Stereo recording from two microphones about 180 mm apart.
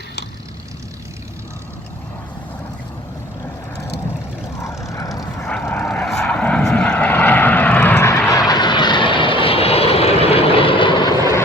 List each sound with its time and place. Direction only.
4.6 s vehicle: 15° left (ahead or behind)
5.5 s vehicle: 10° left (ahead or behind); by 11.1 s 25° left (ahead or behind)